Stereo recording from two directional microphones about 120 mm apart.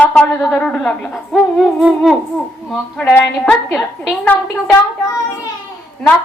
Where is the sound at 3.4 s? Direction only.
5° left (ahead or behind).